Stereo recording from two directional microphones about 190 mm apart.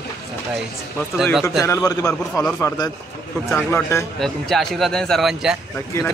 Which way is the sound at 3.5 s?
10° left (ahead or behind).